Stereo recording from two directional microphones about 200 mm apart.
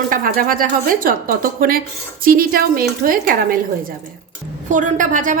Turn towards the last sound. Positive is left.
turn(degrees=-40)  # may be behind; listen again after turning